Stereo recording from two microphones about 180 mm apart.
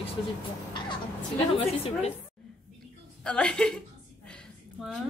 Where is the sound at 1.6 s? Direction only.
35° left (ahead or behind).